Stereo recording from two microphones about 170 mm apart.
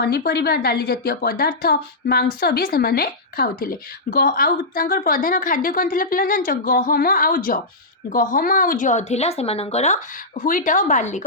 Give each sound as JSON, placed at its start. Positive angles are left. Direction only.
{"t": 0.0, "sound": "a woman's voice", "side_deg": 70}